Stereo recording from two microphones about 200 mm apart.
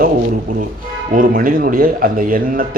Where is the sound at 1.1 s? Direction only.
45° right (ahead or behind).